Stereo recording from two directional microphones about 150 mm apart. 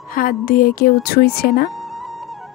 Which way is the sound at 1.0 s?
90° left.